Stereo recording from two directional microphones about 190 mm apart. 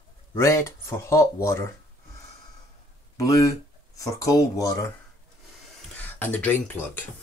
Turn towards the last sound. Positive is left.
turn(degrees=10)  # may be behind; listen again after turning